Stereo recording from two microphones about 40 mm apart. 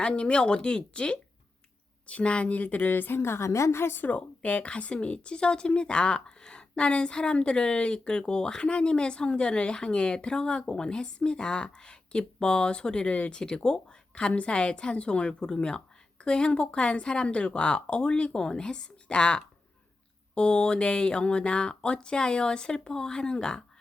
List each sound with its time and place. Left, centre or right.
0.0 s a woman's voice: left
2.8 s a woman's voice: left
4.0 s a woman's voice: left; by 23.6 s centre